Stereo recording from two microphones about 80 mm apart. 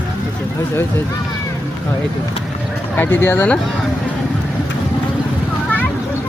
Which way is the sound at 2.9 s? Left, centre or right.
Left.